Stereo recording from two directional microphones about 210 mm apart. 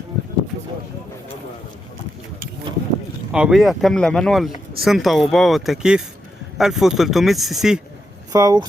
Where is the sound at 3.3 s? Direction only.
5° right (ahead or behind).